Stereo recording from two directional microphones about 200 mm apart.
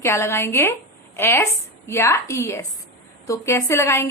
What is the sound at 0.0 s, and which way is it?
A woman's voice, 15° left (ahead or behind).